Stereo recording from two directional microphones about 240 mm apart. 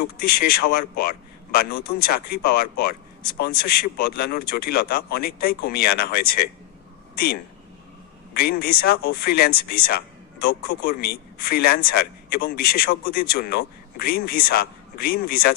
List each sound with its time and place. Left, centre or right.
0.3 s a man's voice: left
8.3 s a man's voice: left